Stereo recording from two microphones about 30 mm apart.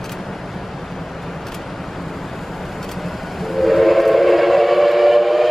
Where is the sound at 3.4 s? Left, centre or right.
Centre.